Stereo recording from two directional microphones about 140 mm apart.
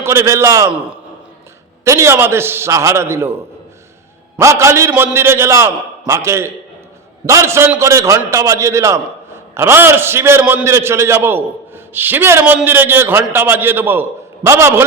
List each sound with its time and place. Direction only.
0.0 s a man's voice: 20° right (ahead or behind)
1.8 s a man's voice: 20° right (ahead or behind)